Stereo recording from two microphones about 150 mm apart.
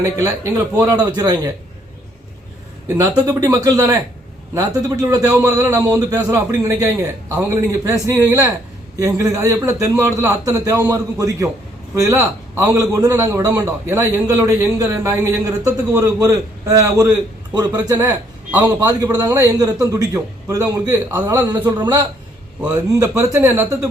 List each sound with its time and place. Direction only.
0.0 s a man's voice: 20° right (ahead or behind)
2.8 s a man's voice: 15° right (ahead or behind)
17.9 s a man's voice: 15° right (ahead or behind)
18.9 s a man's voice: 25° right (ahead or behind)
22.9 s speech: 20° right (ahead or behind)